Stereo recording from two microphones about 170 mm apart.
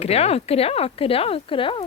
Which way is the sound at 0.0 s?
40° left (ahead or behind).